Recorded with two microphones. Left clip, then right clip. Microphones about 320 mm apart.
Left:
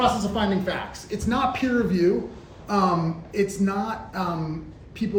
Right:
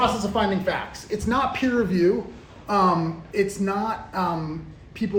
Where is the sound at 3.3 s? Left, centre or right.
Centre.